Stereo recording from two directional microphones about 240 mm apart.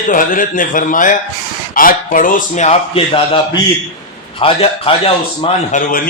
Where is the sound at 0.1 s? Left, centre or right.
Left.